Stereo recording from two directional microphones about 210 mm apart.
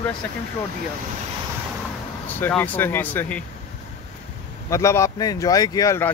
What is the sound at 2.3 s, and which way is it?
Speech, 10° left (ahead or behind).